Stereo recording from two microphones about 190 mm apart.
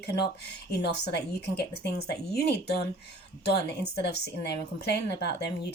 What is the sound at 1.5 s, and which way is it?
Speech, 60° left (ahead or behind).